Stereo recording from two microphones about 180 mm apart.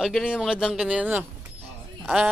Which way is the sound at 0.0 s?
Centre (ahead or behind).